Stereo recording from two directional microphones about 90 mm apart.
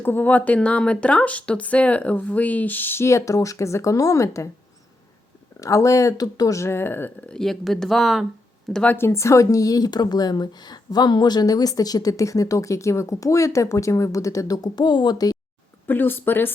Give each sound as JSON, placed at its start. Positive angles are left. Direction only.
{"t": 0.0, "sound": "speech", "side_deg": 20}
{"t": 5.5, "sound": "speech", "side_deg": 40}
{"t": 7.3, "sound": "speech", "side_deg": 5}
{"t": 8.7, "sound": "speech", "side_deg": 15}
{"t": 9.0, "sound": "speech", "side_deg": 30}
{"t": 15.9, "sound": "speech", "side_deg": 20}